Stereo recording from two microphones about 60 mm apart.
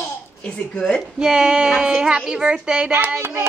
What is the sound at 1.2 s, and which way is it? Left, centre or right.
A woman's voice, centre.